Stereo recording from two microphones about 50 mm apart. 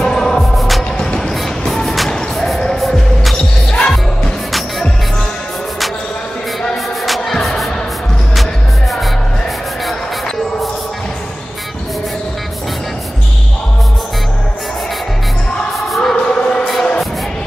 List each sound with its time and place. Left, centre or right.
0.0 s music: centre
1.7 s music: centre
3.7 s music: centre
4.5 s music: centre
7.1 s music: centre
16.0 s a sound: centre